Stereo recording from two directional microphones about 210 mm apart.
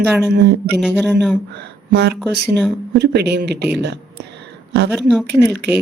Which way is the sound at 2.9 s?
50° right (ahead or behind).